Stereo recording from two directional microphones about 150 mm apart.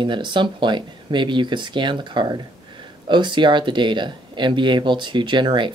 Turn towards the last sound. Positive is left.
turn(degrees=-30)  # may be behind; listen again after turning